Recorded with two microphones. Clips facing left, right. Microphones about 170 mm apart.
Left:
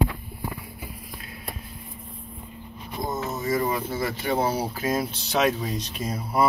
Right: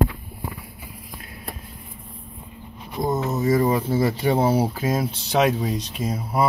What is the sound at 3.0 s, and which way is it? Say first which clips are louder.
Speech: right 6 dB; 35° right (ahead or behind).